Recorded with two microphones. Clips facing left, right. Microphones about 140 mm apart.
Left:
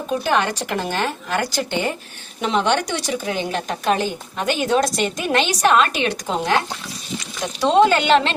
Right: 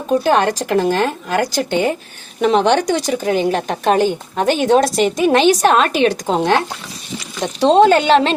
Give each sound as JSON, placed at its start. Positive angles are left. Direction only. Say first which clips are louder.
{"t": 0.1, "sound": "a woman's voice", "louder": "right 6 dB", "side_deg": -45}